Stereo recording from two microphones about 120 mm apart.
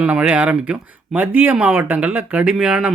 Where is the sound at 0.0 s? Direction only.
10° right (ahead or behind).